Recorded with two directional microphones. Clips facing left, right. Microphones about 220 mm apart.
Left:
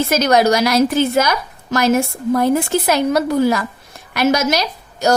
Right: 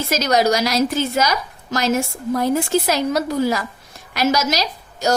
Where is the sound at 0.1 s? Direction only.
55° left (ahead or behind).